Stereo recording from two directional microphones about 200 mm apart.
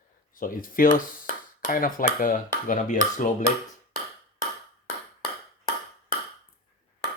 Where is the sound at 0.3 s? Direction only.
45° left (ahead or behind).